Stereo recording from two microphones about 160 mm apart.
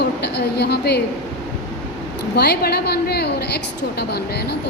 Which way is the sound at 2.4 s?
90° left.